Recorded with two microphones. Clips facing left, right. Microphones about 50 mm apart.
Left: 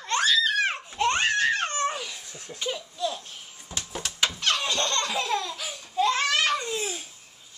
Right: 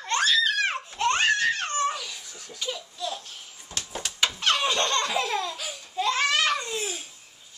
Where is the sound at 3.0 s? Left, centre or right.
Left.